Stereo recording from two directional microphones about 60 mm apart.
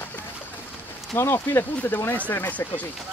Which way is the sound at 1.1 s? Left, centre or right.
Left.